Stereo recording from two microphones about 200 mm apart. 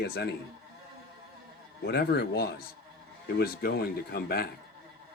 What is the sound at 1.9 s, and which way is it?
Speech, 55° left (ahead or behind).